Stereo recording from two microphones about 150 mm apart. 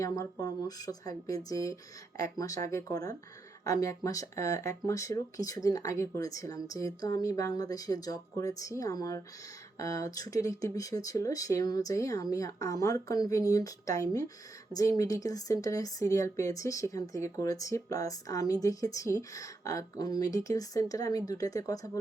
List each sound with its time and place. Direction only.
0.0 s speech: 20° left (ahead or behind)